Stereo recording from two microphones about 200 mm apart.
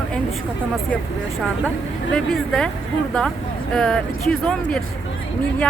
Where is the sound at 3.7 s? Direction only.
5° left (ahead or behind).